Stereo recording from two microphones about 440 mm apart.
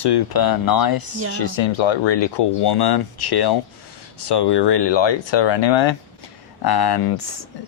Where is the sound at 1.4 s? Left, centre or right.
Left.